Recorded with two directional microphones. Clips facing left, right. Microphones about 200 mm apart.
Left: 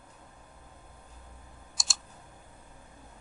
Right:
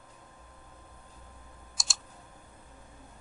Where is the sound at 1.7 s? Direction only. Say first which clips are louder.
Even; centre (ahead or behind).